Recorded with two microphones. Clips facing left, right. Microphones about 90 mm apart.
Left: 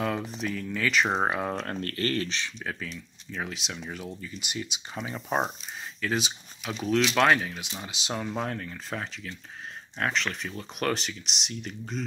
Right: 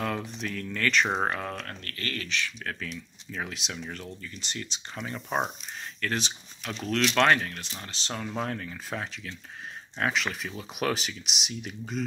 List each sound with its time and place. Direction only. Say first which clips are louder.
0.0 s speech: left 2 dB; centre (ahead or behind)
1.6 s speech: left 8 dB; 35° left (ahead or behind)
2.6 s speech: even; 5° left (ahead or behind)